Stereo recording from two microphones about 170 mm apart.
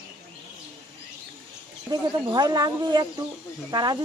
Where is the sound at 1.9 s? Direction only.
25° right (ahead or behind).